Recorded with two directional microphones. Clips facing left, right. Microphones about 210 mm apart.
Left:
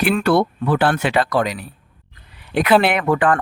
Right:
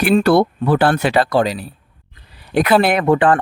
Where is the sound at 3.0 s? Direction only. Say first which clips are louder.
Right 4 dB; 30° right (ahead or behind).